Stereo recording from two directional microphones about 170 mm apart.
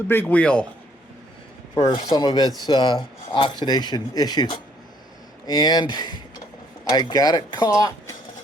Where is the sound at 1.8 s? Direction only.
25° left (ahead or behind).